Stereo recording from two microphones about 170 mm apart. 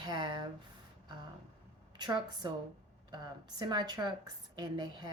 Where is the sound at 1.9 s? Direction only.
25° right (ahead or behind).